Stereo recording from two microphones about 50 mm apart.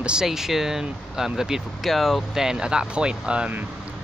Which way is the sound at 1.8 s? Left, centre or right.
Centre.